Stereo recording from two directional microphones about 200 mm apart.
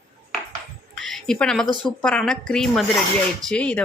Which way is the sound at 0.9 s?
Centre (ahead or behind).